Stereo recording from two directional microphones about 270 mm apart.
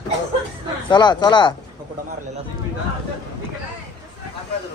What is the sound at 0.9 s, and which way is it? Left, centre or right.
Speech, centre.